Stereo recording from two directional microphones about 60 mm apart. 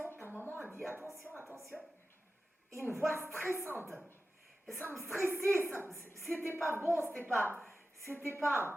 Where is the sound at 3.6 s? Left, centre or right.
Right.